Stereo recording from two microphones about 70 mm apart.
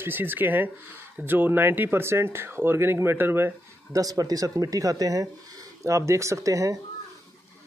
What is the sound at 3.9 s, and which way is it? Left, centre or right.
Speech, right.